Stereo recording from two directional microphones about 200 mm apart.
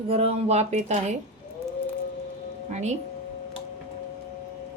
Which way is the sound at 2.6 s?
35° right (ahead or behind).